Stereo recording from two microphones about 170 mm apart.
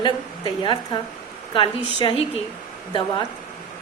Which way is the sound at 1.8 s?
35° right (ahead or behind).